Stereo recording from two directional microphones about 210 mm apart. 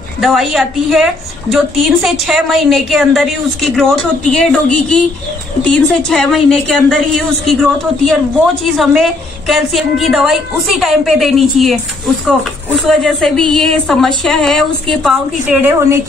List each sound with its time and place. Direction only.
0.2 s a woman's voice: centre (ahead or behind)
8.7 s a woman's voice: centre (ahead or behind)
12.8 s a woman's voice: centre (ahead or behind)